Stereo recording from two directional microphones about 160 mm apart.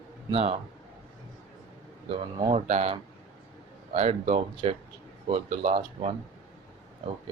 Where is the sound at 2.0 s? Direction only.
35° right (ahead or behind).